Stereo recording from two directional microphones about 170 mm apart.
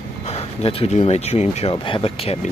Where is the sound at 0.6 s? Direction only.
35° left (ahead or behind).